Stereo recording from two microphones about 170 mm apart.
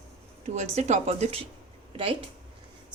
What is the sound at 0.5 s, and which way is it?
Speech, 40° right (ahead or behind).